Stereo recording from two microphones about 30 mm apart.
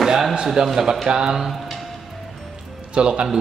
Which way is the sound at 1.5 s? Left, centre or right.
Centre.